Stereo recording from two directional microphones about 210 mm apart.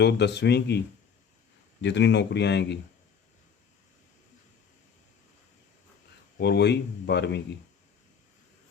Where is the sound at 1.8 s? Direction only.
55° left (ahead or behind).